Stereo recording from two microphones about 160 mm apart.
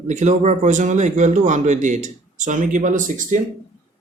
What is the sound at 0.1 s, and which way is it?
A man's voice, 45° right (ahead or behind).